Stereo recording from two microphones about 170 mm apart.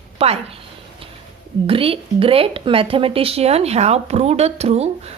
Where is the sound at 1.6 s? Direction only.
30° right (ahead or behind).